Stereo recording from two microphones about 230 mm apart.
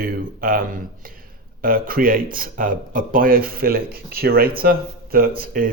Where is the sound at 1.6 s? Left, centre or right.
Right.